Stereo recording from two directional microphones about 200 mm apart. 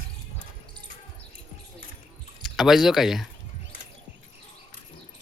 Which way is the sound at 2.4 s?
Centre (ahead or behind).